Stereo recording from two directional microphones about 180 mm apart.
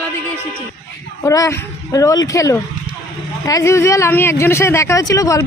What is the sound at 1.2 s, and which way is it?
Speech, 15° left (ahead or behind).